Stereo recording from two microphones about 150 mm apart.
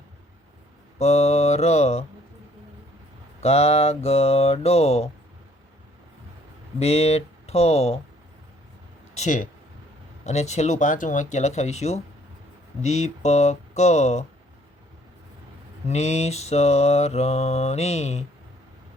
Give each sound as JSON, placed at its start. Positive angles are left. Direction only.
{"t": 0.9, "sound": "mantra", "side_deg": 45}
{"t": 3.4, "sound": "mantra", "side_deg": 45}
{"t": 6.7, "sound": "speech", "side_deg": 45}
{"t": 9.1, "sound": "speech", "side_deg": 55}
{"t": 10.2, "sound": "mantra", "side_deg": 50}
{"t": 15.9, "sound": "mantra", "side_deg": 50}